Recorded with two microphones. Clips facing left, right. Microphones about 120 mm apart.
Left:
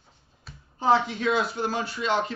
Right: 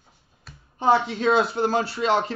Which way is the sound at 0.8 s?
30° right (ahead or behind).